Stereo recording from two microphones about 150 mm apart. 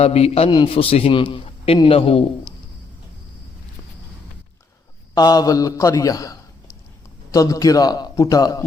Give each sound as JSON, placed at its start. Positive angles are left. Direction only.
{"t": 0.0, "sound": "a man's voice", "side_deg": 45}
{"t": 5.1, "sound": "a man's voice", "side_deg": 25}